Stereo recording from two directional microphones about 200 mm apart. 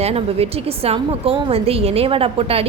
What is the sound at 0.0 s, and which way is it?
A woman's voice, 30° right (ahead or behind).